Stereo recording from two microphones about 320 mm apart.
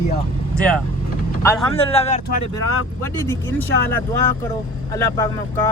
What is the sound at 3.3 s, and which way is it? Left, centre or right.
Speech, centre.